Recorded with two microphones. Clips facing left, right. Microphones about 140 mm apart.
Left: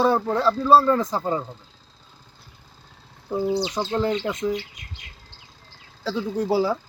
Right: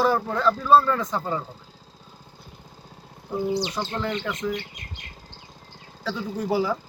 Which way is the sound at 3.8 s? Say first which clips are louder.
Left 3 dB; 30° left (ahead or behind).